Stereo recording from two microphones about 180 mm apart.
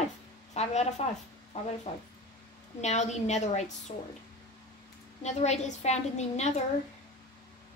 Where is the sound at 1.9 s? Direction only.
40° left (ahead or behind).